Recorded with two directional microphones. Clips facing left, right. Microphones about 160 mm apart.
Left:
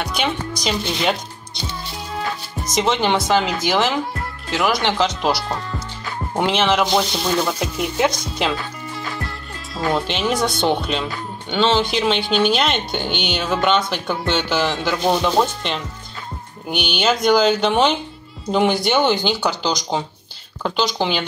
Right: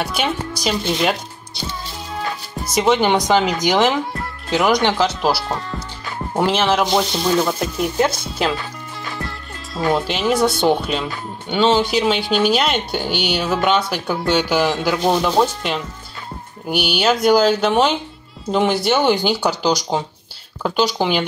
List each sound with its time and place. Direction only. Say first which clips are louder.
0.0 s speech: right 1 dB; 5° right (ahead or behind)
2.7 s speech: right 3 dB; 10° right (ahead or behind)
4.6 s speech: right 3 dB; 20° right (ahead or behind)
4.9 s speech: right 1 dB; 5° right (ahead or behind)
9.9 s speech: right 2 dB; 5° right (ahead or behind)